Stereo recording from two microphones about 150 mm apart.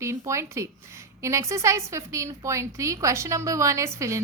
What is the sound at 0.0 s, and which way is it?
A woman's voice, 20° right (ahead or behind).